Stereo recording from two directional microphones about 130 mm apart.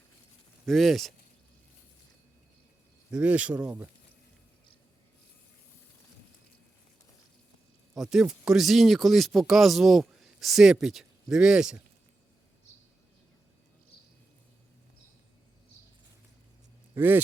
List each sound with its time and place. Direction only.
0.6 s speech: centre (ahead or behind)
3.1 s speech: 10° right (ahead or behind)
7.9 s speech: 5° right (ahead or behind)
16.9 s speech: 15° right (ahead or behind)